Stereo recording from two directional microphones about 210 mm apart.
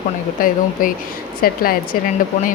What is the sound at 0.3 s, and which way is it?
Speech, 40° left (ahead or behind).